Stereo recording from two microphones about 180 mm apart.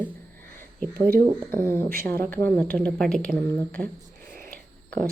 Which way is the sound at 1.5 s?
15° left (ahead or behind).